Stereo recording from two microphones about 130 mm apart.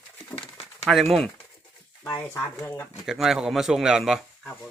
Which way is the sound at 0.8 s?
Centre (ahead or behind).